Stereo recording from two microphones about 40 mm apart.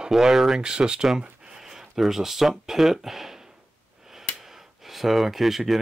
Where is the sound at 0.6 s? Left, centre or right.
Right.